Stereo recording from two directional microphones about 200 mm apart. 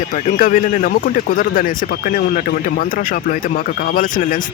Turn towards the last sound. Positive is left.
turn(degrees=40)  # may be behind; listen again after turning